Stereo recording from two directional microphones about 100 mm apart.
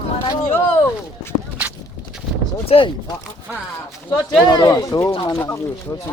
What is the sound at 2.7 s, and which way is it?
Speech, 65° left (ahead or behind).